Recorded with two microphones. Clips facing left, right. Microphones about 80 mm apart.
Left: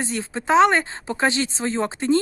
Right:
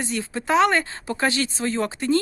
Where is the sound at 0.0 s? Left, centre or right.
Left.